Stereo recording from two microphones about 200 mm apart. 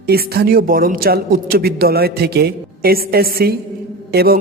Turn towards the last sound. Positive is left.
turn(degrees=-50)  # may be behind; listen again after turning